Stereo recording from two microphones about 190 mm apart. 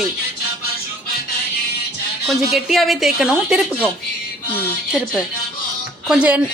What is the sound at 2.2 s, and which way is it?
Speech, centre (ahead or behind).